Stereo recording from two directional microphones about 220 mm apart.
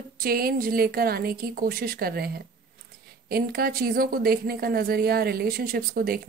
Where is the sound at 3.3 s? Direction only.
45° right (ahead or behind).